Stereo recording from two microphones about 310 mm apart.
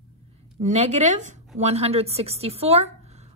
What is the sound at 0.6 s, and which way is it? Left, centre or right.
A woman's voice, right.